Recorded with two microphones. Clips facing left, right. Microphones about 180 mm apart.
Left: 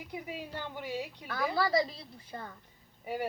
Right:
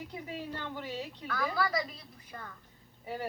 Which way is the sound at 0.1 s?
10° left (ahead or behind).